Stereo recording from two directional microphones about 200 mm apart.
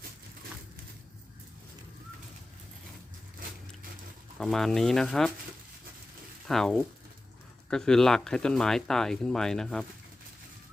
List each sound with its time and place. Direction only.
4.4 s speech: centre (ahead or behind)
6.5 s speech: centre (ahead or behind)